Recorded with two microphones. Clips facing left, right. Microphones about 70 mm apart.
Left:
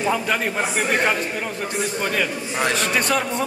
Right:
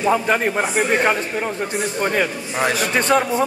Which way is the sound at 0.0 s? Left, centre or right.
Centre.